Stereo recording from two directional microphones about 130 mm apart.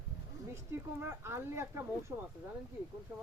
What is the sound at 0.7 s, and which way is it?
Speech, 20° right (ahead or behind).